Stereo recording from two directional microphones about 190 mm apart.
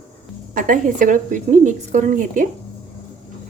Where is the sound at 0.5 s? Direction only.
45° right (ahead or behind).